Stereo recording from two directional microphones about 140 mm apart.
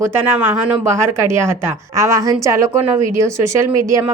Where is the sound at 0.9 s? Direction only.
20° right (ahead or behind).